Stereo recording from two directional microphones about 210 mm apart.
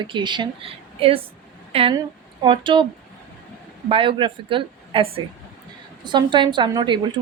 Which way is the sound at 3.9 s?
25° right (ahead or behind).